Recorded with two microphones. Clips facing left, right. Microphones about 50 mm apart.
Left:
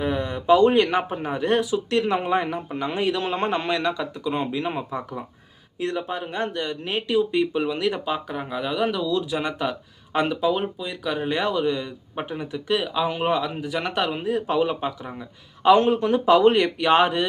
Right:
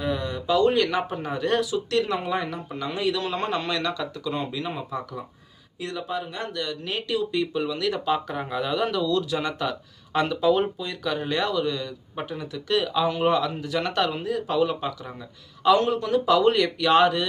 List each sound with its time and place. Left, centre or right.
0.0 s speech: left
8.0 s a man's voice: centre; by 17.2 s left